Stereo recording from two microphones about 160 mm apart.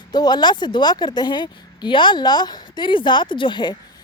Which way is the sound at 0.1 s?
25° left (ahead or behind).